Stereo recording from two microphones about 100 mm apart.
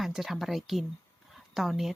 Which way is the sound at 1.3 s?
Centre (ahead or behind).